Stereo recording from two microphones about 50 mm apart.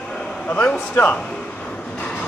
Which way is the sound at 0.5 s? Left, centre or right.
Left.